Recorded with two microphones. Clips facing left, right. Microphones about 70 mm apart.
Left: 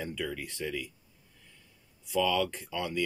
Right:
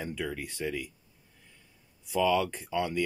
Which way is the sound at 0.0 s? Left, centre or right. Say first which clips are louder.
Right 1 dB; centre.